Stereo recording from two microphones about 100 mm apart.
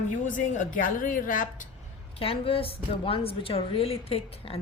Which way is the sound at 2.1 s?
70° left (ahead or behind).